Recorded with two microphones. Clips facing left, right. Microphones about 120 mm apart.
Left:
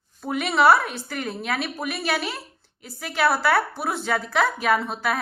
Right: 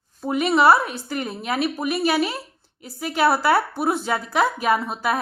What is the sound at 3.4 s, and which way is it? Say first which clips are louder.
A woman's voice: right 3 dB; 10° right (ahead or behind).